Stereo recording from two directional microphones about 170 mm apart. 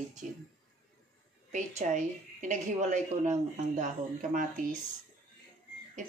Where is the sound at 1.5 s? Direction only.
45° right (ahead or behind).